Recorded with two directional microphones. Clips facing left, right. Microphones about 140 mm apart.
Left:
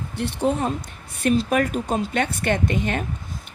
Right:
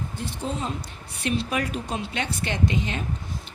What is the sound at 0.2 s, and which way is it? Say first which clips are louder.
Speech: left 9 dB; 65° left (ahead or behind).